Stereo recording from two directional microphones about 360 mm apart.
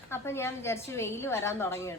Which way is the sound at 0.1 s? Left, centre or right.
Centre.